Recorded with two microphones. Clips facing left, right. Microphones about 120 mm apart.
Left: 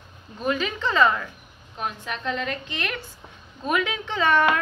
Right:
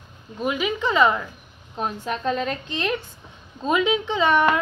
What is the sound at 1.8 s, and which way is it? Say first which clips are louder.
A woman's voice: right 4 dB; 35° right (ahead or behind).